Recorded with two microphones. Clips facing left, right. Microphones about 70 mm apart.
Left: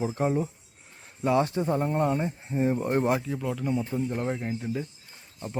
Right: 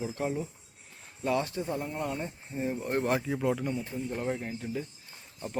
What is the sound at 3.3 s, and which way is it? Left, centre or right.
Speech, centre.